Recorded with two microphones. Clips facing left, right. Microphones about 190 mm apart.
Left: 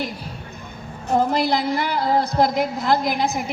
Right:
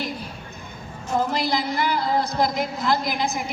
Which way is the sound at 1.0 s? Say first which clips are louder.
Left 4 dB; 60° left (ahead or behind).